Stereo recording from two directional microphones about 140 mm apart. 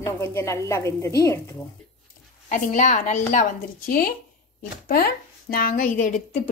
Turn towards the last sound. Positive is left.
turn(degrees=70)  # may be behind; listen again after turning